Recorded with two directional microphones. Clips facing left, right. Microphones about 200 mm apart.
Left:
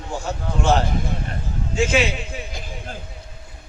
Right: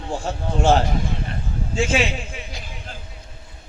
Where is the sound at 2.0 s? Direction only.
40° left (ahead or behind).